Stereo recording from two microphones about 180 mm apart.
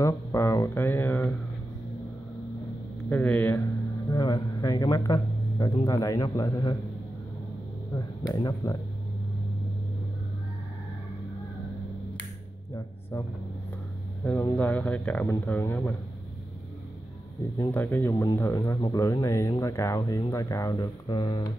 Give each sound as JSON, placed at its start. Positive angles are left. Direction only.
{"t": 0.0, "sound": "speech", "side_deg": 15}
{"t": 3.1, "sound": "speech", "side_deg": 10}
{"t": 4.1, "sound": "a man's voice", "side_deg": 20}
{"t": 7.9, "sound": "speech", "side_deg": 20}
{"t": 14.2, "sound": "speech", "side_deg": 10}
{"t": 17.6, "sound": "speech", "side_deg": 10}